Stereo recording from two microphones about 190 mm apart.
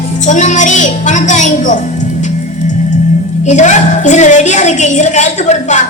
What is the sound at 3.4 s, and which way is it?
A child's voice, 40° left (ahead or behind).